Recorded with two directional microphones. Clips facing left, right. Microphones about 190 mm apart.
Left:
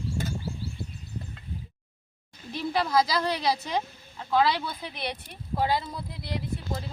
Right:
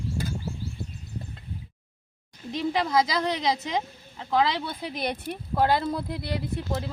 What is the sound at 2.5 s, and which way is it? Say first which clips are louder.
Speech: right 1 dB; 15° right (ahead or behind).